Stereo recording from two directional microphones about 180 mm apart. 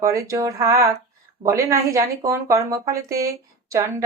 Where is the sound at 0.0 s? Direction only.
15° right (ahead or behind).